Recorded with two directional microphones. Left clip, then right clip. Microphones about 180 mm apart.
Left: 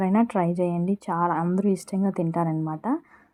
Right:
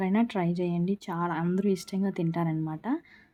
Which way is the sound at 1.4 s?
15° right (ahead or behind).